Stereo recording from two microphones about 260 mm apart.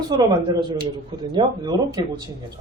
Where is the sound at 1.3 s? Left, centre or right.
Centre.